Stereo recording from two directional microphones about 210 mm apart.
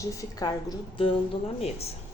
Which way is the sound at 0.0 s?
15° left (ahead or behind).